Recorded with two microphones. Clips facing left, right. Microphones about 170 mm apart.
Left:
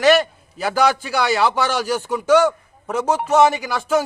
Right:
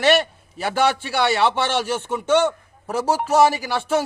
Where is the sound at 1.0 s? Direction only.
30° right (ahead or behind).